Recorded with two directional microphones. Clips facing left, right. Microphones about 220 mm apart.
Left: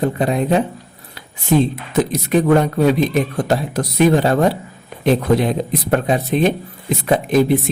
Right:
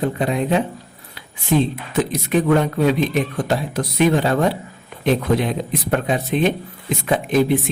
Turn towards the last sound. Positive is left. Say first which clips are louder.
# left 3 dB
turn(degrees=40)  # may be behind; listen again after turning